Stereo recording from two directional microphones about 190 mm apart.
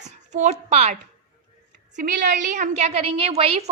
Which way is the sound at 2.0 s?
40° right (ahead or behind).